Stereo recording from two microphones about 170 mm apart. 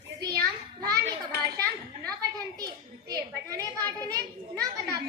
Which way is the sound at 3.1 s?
20° right (ahead or behind).